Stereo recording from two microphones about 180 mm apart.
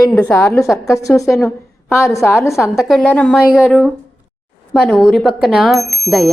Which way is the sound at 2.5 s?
Centre (ahead or behind).